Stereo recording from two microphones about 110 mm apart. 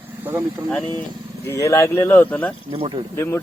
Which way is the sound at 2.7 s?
60° right (ahead or behind).